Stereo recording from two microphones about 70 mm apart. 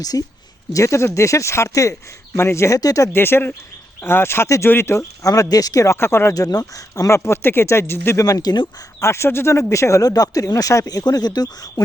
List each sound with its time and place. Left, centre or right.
0.0 s speech: left
0.7 s speech: left
3.1 s speech: left
4.9 s speech: left
6.0 s speech: left
6.3 s speech: left
7.1 s speech: left
8.2 s speech: left
9.0 s speech: left